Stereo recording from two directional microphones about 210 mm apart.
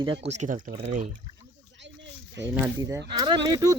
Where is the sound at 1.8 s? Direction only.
60° right (ahead or behind).